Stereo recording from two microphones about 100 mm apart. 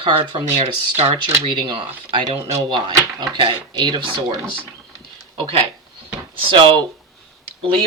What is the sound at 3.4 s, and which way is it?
Speech, 55° right (ahead or behind).